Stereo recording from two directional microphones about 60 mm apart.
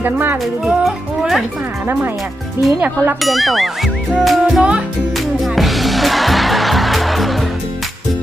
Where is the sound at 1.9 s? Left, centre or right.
Right.